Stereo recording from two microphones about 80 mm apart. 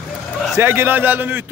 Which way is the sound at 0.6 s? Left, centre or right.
Right.